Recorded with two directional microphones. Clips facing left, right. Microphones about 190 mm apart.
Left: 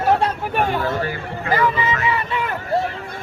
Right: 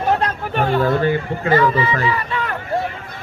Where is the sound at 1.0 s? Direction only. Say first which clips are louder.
Right 7 dB; 25° right (ahead or behind).